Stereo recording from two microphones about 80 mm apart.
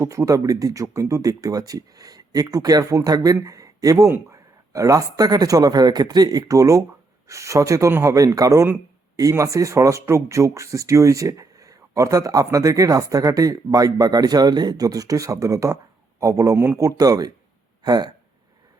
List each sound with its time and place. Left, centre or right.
0.0 s speech: right